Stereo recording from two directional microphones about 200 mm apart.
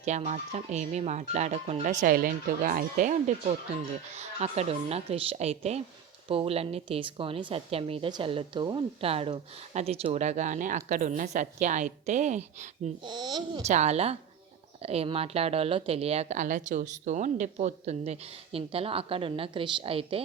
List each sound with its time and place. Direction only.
0.0 s a woman's voice: 35° right (ahead or behind)
13.0 s a woman's voice: 20° right (ahead or behind)
13.6 s a woman's voice: 35° right (ahead or behind)